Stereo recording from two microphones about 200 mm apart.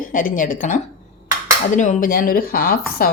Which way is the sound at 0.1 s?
45° left (ahead or behind).